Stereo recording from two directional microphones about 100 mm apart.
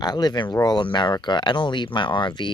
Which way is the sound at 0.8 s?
50° left (ahead or behind).